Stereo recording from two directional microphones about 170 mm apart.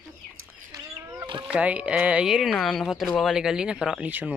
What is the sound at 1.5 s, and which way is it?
Speech, 10° right (ahead or behind).